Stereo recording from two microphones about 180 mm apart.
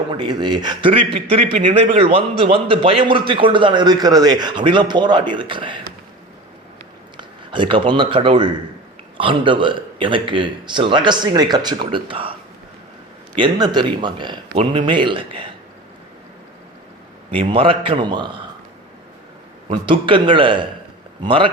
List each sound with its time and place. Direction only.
0.1 s a man's voice: 25° right (ahead or behind)
7.2 s a man's voice: 25° right (ahead or behind)
13.4 s a man's voice: 25° right (ahead or behind)
17.3 s a man's voice: 30° right (ahead or behind)
19.7 s a man's voice: 25° right (ahead or behind)